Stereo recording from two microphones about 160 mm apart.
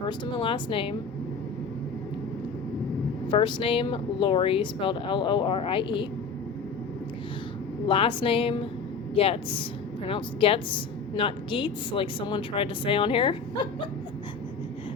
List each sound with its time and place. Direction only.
0.0 s a woman's voice: 30° left (ahead or behind)
3.2 s a woman's voice: 35° left (ahead or behind)
7.9 s a woman's voice: 35° left (ahead or behind)